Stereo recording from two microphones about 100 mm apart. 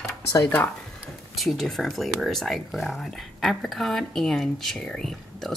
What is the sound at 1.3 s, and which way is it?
Speech, centre (ahead or behind).